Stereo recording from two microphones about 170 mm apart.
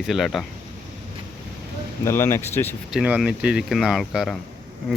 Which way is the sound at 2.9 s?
5° right (ahead or behind).